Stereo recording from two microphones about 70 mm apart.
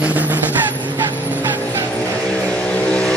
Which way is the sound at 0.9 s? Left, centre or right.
Right.